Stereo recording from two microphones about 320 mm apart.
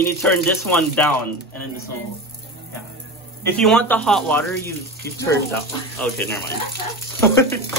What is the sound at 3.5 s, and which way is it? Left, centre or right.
Speech, centre.